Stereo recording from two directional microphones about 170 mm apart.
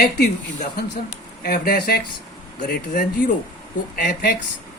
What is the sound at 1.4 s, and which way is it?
Speech, 65° left (ahead or behind).